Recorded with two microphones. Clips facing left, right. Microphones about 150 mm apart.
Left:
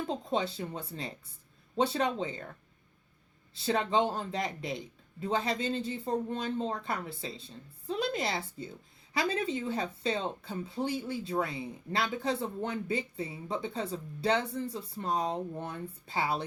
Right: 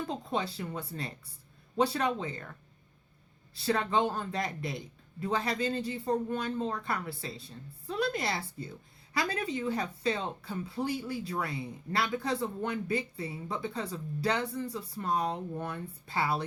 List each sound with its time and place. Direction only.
0.1 s speech: 25° left (ahead or behind)
3.5 s speech: 20° left (ahead or behind)